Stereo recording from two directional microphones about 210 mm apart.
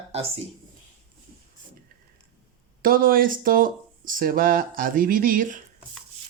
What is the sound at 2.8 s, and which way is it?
Speech, 45° right (ahead or behind).